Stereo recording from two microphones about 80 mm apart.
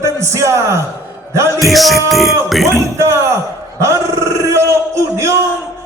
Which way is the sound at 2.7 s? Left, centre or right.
Right.